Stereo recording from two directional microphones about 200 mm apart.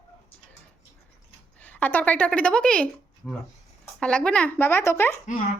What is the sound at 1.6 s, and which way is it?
A woman's voice, 10° left (ahead or behind).